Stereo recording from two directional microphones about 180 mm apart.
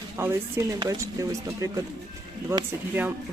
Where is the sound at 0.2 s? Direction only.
15° right (ahead or behind).